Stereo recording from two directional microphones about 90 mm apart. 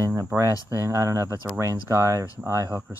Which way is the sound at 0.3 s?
40° right (ahead or behind).